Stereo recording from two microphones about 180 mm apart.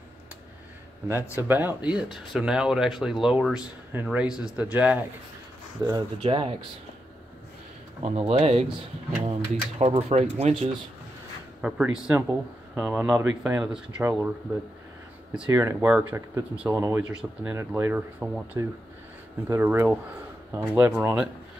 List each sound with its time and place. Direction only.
1.5 s speech: 10° right (ahead or behind)
6.2 s speech: 30° right (ahead or behind)
8.0 s speech: 35° right (ahead or behind)
11.6 s speech: 5° right (ahead or behind)
15.3 s speech: 10° right (ahead or behind)